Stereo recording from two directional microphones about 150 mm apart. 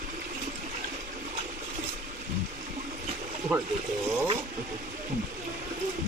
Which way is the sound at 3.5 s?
10° right (ahead or behind).